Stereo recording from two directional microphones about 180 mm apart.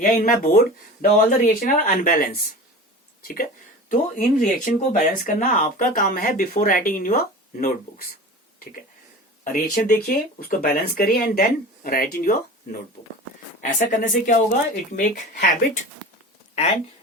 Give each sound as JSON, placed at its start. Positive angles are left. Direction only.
{"t": 0.0, "sound": "speech", "side_deg": 45}
{"t": 9.4, "sound": "speech", "side_deg": 50}
{"t": 13.6, "sound": "speech", "side_deg": 45}